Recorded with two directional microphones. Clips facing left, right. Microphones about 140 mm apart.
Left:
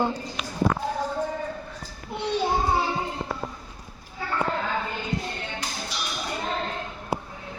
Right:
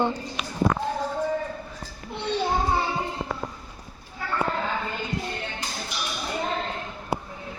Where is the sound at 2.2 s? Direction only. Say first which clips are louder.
Left 1 dB; 5° left (ahead or behind).